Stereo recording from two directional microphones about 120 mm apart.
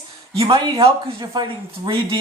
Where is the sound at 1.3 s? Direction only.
35° right (ahead or behind).